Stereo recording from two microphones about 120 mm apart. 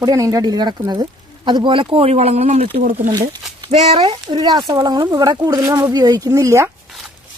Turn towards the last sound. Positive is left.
turn(degrees=-25)  # may be behind; listen again after turning